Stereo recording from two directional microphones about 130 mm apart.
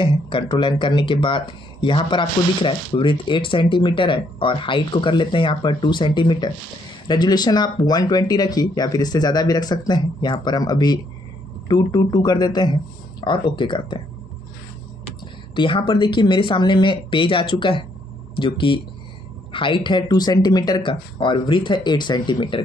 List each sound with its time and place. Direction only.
0.0 s speech: 40° left (ahead or behind)
15.5 s speech: 40° left (ahead or behind)